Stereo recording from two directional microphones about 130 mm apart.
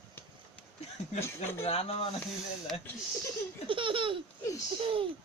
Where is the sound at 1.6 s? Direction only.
55° left (ahead or behind).